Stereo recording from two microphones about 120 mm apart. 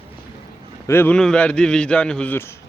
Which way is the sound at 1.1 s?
5° left (ahead or behind).